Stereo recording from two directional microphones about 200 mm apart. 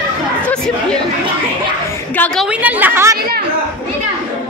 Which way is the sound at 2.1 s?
5° left (ahead or behind).